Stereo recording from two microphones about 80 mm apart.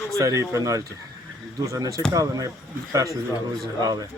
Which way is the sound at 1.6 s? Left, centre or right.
Right.